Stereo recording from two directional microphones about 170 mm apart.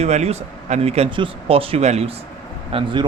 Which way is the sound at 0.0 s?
40° right (ahead or behind).